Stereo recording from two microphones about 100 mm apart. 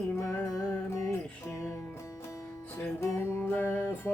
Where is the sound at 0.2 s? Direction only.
30° left (ahead or behind).